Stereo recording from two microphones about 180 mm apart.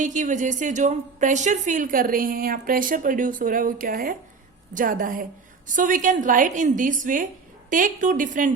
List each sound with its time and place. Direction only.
0.0 s a woman's voice: 45° right (ahead or behind)